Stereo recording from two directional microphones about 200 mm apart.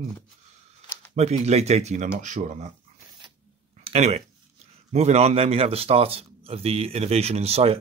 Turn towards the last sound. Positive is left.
turn(degrees=-30)  # may be behind; listen again after turning